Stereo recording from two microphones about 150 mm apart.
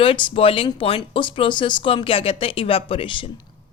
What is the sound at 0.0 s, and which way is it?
Speech, 35° left (ahead or behind).